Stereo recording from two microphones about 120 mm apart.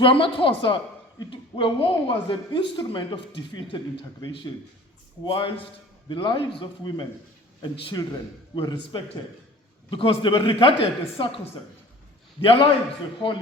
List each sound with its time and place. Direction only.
0.0 s a man's voice: 45° left (ahead or behind)
12.4 s speech: 50° left (ahead or behind)